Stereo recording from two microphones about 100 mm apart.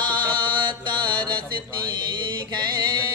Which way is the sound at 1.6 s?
50° right (ahead or behind).